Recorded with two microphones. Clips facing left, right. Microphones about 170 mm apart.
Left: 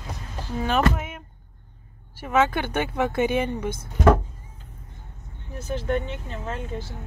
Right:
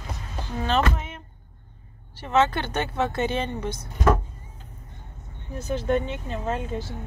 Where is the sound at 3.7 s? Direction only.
60° left (ahead or behind).